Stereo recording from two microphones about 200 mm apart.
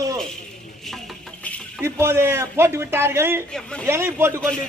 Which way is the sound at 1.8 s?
10° right (ahead or behind).